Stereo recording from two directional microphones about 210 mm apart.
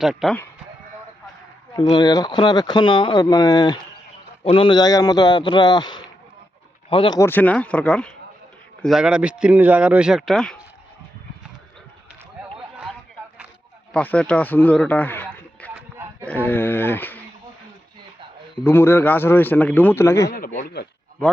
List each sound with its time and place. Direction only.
0.0 s speech: centre (ahead or behind)
1.7 s a man's voice: 20° left (ahead or behind); by 10.6 s 5° left (ahead or behind)
13.9 s a man's voice: 5° left (ahead or behind)
18.6 s a man's voice: 10° left (ahead or behind)
20.6 s a man's voice: 45° left (ahead or behind)